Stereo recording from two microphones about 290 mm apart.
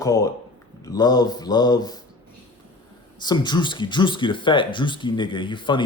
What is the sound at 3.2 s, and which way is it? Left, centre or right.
Speech, centre.